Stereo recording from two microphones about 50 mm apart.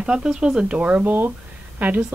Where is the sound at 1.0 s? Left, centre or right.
Right.